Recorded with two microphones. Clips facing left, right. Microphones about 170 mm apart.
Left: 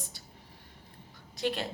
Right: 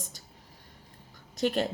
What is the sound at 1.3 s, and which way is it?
Speech, 45° right (ahead or behind).